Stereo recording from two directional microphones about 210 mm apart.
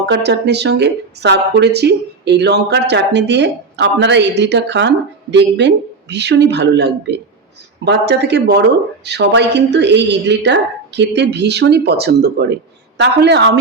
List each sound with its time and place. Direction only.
0.0 s a woman's voice: 55° right (ahead or behind)